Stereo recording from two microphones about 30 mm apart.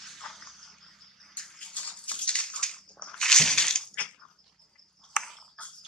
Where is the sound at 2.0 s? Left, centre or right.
Left.